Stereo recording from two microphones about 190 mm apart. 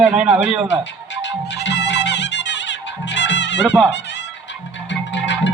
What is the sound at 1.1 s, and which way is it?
Music, 70° left (ahead or behind).